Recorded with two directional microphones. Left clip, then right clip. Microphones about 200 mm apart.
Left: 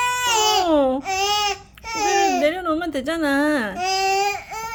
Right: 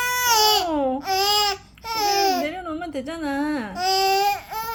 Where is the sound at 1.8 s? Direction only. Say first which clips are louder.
Left 1 dB; 5° left (ahead or behind).